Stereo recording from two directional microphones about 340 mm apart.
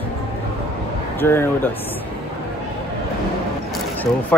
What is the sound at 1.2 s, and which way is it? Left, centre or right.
Speech, centre.